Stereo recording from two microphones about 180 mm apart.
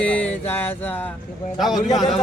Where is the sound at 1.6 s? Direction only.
Centre (ahead or behind).